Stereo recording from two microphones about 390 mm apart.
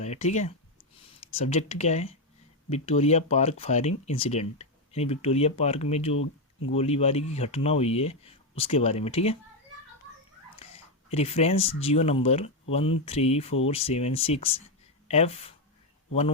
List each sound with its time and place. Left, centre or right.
0.0 s speech: centre
10.6 s speech: centre